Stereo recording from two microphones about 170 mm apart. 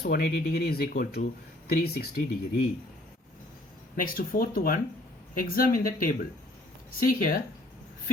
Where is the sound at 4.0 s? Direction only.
55° left (ahead or behind).